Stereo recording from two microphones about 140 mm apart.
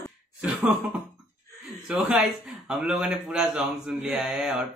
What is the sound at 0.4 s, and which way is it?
Speech, 10° right (ahead or behind).